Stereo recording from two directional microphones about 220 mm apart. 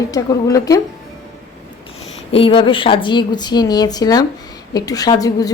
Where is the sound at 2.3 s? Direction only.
25° left (ahead or behind).